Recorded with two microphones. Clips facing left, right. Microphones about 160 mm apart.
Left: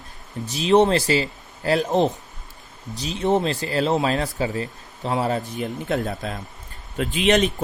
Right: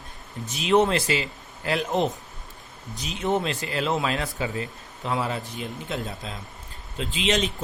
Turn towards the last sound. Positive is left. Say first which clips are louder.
# left 6 dB
turn(degrees=55)  # may be behind; listen again after turning